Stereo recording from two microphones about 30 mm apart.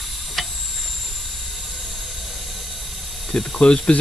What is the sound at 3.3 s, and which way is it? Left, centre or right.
Speech, left.